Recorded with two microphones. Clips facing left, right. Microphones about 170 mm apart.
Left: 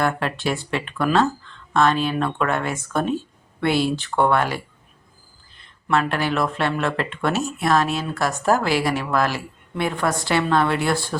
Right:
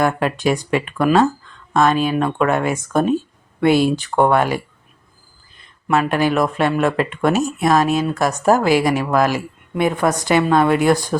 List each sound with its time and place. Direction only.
0.0 s a woman's voice: 15° right (ahead or behind)
5.9 s a woman's voice: 15° right (ahead or behind)